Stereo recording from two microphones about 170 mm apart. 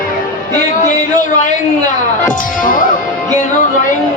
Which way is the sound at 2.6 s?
55° left (ahead or behind).